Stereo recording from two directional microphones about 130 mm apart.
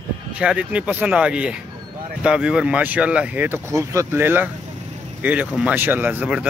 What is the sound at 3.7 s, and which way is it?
Speech, 25° right (ahead or behind).